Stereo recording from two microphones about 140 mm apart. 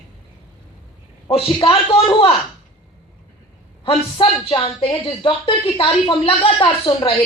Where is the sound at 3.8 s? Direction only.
40° left (ahead or behind).